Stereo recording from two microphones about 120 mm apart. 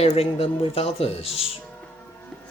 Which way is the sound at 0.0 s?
60° left (ahead or behind).